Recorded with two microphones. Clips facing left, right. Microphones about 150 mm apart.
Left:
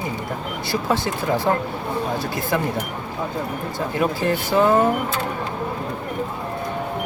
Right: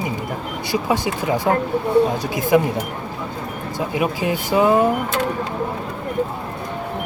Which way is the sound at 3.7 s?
15° right (ahead or behind).